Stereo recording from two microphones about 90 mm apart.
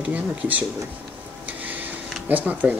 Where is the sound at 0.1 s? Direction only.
20° right (ahead or behind).